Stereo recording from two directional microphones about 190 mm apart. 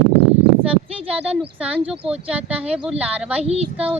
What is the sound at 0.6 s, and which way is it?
A woman's voice, 5° right (ahead or behind).